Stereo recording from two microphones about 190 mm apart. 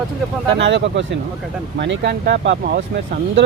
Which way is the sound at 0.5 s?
65° right (ahead or behind).